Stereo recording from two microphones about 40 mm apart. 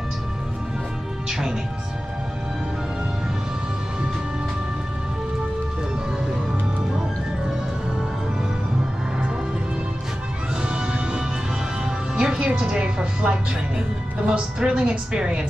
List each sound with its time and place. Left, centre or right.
10.6 s music: right